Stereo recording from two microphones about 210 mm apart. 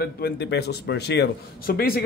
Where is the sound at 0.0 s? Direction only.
50° left (ahead or behind).